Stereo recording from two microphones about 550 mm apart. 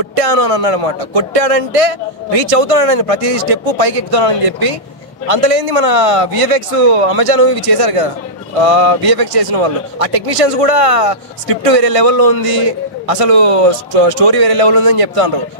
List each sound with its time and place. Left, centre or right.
0.1 s a man's voice: right